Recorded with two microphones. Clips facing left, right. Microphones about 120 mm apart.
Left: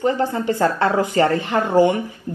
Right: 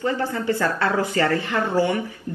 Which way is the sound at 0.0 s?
20° left (ahead or behind).